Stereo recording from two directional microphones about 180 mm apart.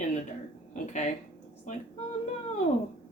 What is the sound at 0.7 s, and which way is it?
Speech, 40° left (ahead or behind).